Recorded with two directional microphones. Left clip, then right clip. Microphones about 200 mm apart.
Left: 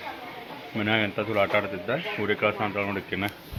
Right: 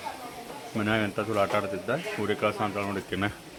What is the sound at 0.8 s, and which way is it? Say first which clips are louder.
A man's voice: left 2 dB; 5° right (ahead or behind).